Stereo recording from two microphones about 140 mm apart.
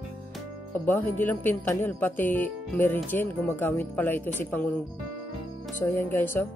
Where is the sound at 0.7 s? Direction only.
10° left (ahead or behind).